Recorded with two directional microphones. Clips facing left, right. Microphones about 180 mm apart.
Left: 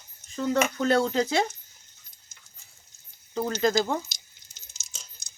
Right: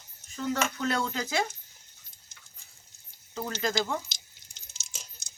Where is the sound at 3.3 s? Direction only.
35° left (ahead or behind).